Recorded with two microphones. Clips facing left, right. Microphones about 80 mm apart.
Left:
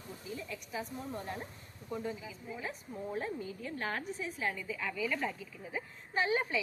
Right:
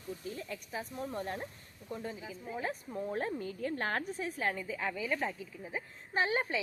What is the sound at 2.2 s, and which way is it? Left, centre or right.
A woman's voice, right.